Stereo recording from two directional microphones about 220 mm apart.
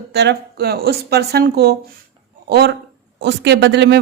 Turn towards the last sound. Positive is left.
turn(degrees=-50)  # may be behind; listen again after turning